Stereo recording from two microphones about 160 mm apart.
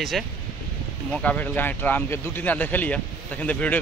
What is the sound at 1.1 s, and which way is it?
Speech, 10° left (ahead or behind).